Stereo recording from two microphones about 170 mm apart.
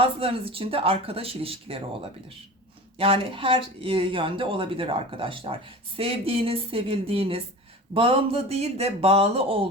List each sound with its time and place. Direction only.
0.0 s speech: 35° right (ahead or behind)